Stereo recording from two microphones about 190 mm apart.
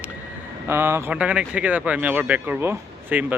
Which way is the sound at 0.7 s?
15° right (ahead or behind).